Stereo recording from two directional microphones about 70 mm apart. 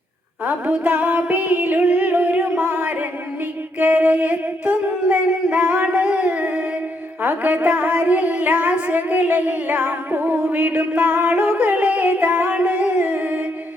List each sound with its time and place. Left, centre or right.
0.4 s music: right
3.8 s singing: right
7.2 s music: right